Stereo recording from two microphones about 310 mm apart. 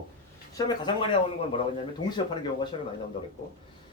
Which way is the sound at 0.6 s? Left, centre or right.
Centre.